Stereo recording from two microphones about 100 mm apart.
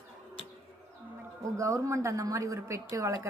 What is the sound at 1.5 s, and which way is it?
A woman's voice, 30° right (ahead or behind).